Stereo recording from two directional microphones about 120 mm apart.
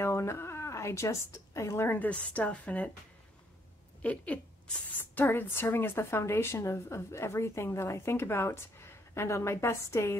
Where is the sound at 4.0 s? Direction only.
10° left (ahead or behind).